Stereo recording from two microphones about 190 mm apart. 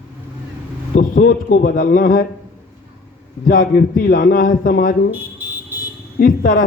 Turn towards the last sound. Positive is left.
turn(degrees=50)  # may be behind; listen again after turning